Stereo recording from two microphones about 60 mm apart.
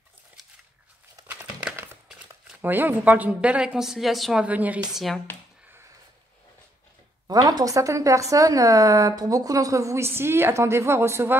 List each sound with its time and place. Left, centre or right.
2.6 s a woman's voice: right; by 4.4 s centre
4.4 s a woman's voice: right
7.2 s a woman's voice: right